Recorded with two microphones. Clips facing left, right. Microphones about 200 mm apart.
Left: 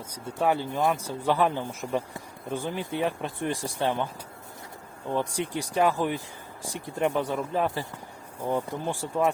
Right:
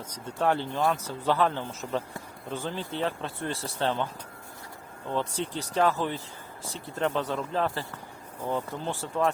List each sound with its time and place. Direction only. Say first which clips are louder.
0.1 s speech: left 1 dB; 10° left (ahead or behind)
5.1 s speech: left 2 dB; 15° left (ahead or behind)